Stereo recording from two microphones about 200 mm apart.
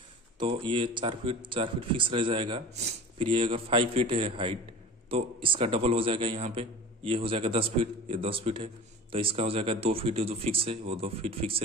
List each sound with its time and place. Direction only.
0.4 s speech: 25° right (ahead or behind)